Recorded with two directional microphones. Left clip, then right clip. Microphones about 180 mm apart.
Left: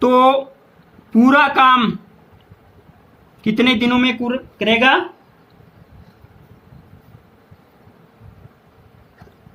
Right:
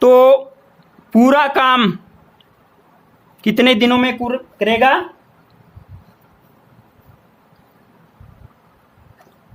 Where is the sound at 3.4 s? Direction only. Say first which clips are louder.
Right 3 dB; 65° right (ahead or behind).